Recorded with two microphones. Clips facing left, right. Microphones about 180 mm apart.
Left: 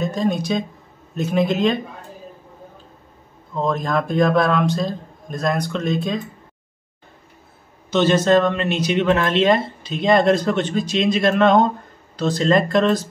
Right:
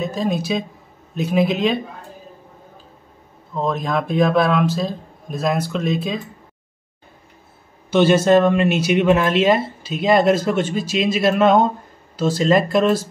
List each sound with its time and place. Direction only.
0.0 s a man's voice: centre (ahead or behind)
3.5 s a man's voice: centre (ahead or behind)
7.9 s speech: 10° right (ahead or behind)